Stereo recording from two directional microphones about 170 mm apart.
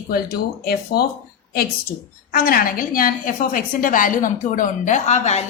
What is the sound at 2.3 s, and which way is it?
A woman's voice, 60° left (ahead or behind).